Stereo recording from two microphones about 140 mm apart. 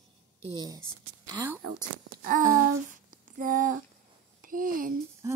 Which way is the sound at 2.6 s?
70° right (ahead or behind).